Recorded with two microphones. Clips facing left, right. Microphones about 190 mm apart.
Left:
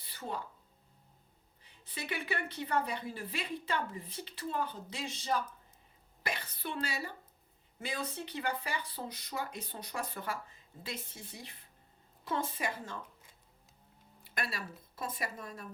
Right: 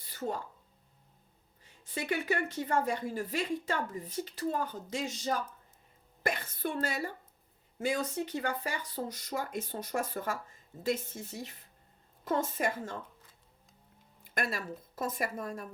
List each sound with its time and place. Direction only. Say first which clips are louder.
0.0 s a sound: right 5 dB; 45° right (ahead or behind)
1.6 s a woman's voice: right 7 dB; 45° right (ahead or behind)
14.3 s a woman's voice: right 5 dB; 50° right (ahead or behind)